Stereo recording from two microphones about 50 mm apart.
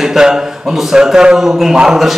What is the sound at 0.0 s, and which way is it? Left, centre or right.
A man's voice, centre.